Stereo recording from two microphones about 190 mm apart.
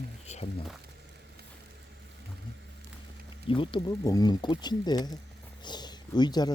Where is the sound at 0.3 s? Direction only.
35° left (ahead or behind).